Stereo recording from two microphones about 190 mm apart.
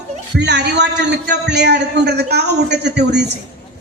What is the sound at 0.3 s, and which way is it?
A woman's voice, 65° right (ahead or behind).